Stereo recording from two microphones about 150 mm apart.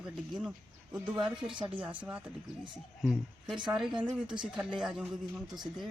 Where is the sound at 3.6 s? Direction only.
5° right (ahead or behind).